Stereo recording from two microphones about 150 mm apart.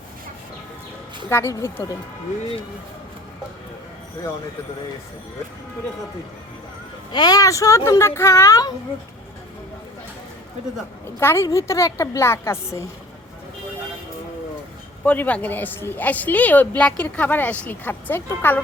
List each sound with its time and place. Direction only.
1.3 s a woman's voice: 15° left (ahead or behind)
7.1 s a woman's voice: 25° left (ahead or behind)
11.2 s a woman's voice: 15° left (ahead or behind)
15.0 s a woman's voice: 10° left (ahead or behind)